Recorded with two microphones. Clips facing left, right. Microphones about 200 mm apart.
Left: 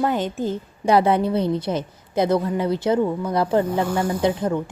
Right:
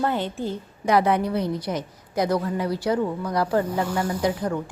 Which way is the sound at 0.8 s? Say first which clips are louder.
Left 3 dB; 30° left (ahead or behind).